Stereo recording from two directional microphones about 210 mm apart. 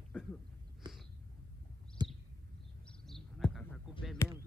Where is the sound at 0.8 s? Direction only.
20° right (ahead or behind).